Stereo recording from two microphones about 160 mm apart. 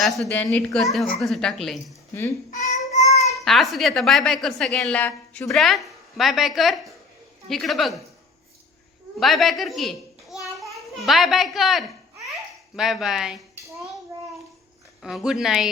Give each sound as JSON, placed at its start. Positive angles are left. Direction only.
{"t": 0.0, "sound": "a woman's voice", "side_deg": 0}
{"t": 2.5, "sound": "child singing", "side_deg": 50}
{"t": 3.3, "sound": "a woman's voice", "side_deg": 0}
{"t": 9.1, "sound": "a child's voice", "side_deg": 0}
{"t": 12.3, "sound": "babbling", "side_deg": 0}
{"t": 15.0, "sound": "a woman's voice", "side_deg": -5}